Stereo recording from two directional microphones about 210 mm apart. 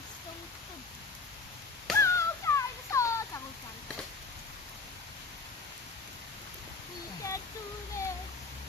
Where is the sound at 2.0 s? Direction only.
15° left (ahead or behind).